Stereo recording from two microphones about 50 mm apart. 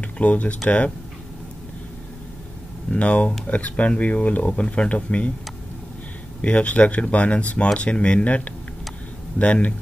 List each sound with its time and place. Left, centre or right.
0.0 s speech: left
2.9 s speech: left
6.4 s speech: left